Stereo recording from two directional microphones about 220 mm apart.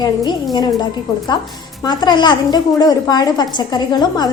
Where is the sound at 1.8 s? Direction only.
20° left (ahead or behind).